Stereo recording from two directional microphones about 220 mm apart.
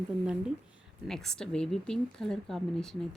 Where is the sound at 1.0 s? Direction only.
Centre (ahead or behind).